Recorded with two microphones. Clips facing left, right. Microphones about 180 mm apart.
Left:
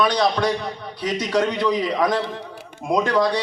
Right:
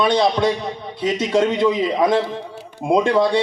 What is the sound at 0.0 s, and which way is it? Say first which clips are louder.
Speech: right 3 dB; 25° right (ahead or behind).